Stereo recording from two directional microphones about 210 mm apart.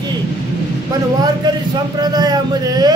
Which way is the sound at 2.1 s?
20° right (ahead or behind).